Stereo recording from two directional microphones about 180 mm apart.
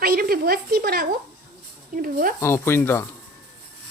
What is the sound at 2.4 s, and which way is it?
Speech, 15° left (ahead or behind).